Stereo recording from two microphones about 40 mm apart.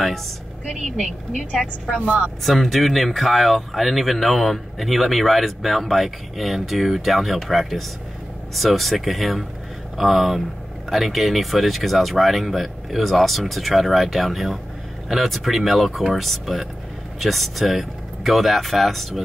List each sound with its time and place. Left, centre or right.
1.9 s speech: right
2.4 s speech: centre